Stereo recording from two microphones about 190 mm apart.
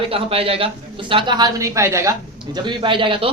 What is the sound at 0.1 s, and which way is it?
A man's voice, 30° right (ahead or behind).